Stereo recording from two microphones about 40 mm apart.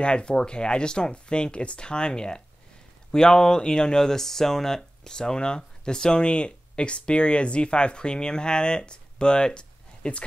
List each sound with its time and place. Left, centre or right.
0.0 s speech: left